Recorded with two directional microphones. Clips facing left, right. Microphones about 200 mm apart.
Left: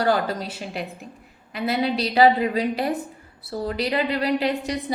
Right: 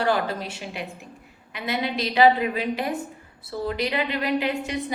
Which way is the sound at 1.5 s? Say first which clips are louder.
Left 4 dB; 35° left (ahead or behind).